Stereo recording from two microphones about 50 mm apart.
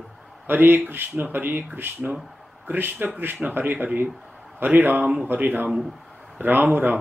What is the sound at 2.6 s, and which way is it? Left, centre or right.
Speech, right.